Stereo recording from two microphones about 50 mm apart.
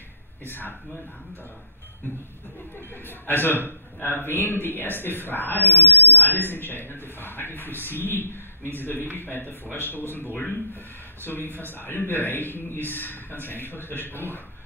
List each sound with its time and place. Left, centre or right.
0.5 s a man's voice: left
3.1 s a man's voice: left